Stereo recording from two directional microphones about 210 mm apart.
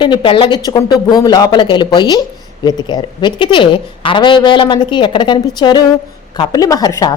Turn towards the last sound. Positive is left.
turn(degrees=20)  # may be behind; listen again after turning